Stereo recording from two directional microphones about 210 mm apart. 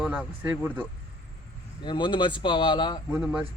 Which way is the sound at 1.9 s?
20° left (ahead or behind).